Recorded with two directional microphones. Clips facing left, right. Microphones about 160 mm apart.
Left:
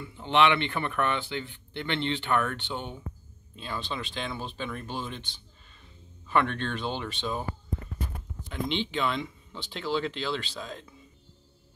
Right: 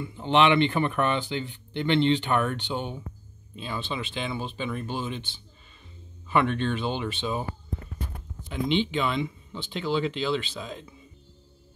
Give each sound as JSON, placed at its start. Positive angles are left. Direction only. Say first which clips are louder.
{"t": 0.0, "sound": "speech", "louder": "right 2 dB", "side_deg": -20}
{"t": 8.5, "sound": "speech", "louder": "right 5 dB", "side_deg": -5}